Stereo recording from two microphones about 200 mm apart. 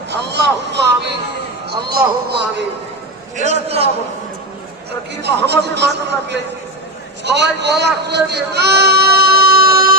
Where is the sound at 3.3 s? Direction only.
35° right (ahead or behind).